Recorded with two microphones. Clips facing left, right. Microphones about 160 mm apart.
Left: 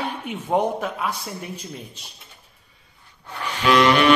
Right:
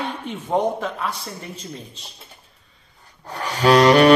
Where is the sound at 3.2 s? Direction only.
40° right (ahead or behind).